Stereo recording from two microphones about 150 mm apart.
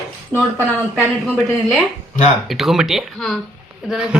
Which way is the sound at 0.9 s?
5° left (ahead or behind).